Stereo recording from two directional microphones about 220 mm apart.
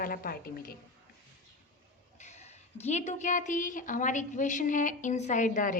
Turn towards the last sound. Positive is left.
turn(degrees=35)  # may be behind; listen again after turning